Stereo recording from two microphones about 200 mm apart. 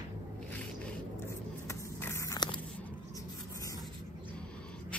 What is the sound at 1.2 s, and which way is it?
Biting, 15° left (ahead or behind).